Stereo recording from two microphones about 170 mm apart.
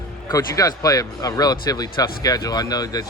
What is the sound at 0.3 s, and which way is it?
Speech, 20° left (ahead or behind).